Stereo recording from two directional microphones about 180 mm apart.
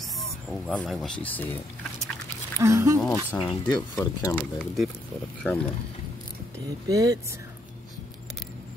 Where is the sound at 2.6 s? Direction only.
15° right (ahead or behind).